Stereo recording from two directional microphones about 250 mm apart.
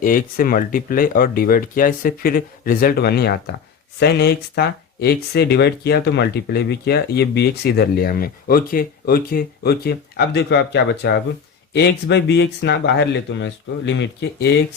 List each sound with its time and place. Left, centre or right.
0.0 s speech: left